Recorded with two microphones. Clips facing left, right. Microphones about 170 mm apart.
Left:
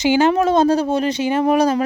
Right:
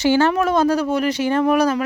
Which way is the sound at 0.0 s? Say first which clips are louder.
Left 1 dB; 15° left (ahead or behind).